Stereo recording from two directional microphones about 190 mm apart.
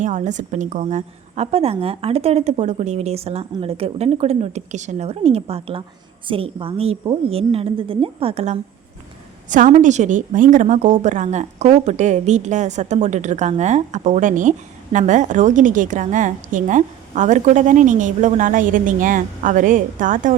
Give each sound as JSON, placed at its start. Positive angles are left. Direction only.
{"t": 0.0, "sound": "a woman's voice", "side_deg": -40}